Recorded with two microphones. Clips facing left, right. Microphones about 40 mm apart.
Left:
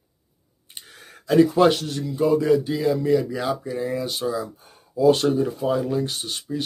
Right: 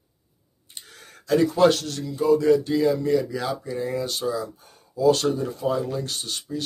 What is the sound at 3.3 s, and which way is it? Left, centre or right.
Speech, centre.